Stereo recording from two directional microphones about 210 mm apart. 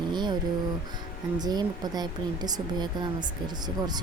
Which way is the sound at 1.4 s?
20° right (ahead or behind).